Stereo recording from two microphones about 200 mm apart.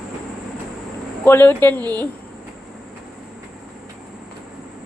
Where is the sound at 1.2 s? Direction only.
10° left (ahead or behind).